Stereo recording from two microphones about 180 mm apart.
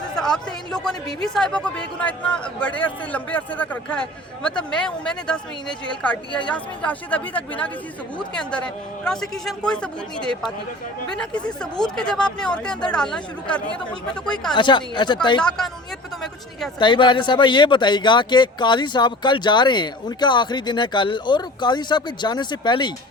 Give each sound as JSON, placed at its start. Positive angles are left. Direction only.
{"t": 0.1, "sound": "speech", "side_deg": 5}
{"t": 14.5, "sound": "speech", "side_deg": 25}
{"t": 15.4, "sound": "speech", "side_deg": 5}
{"t": 16.7, "sound": "speech", "side_deg": 25}